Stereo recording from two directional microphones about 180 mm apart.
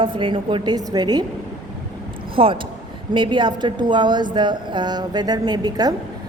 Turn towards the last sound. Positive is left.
turn(degrees=-20)  # may be behind; listen again after turning